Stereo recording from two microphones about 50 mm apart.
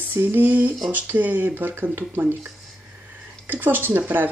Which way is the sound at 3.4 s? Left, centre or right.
Right.